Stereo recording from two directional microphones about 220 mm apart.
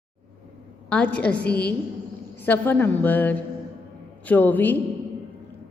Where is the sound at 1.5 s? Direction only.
45° left (ahead or behind).